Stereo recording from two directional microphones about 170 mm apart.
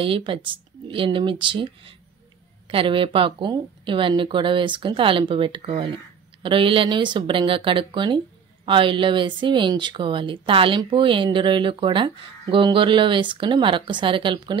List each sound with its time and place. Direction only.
0.0 s speech: 30° right (ahead or behind)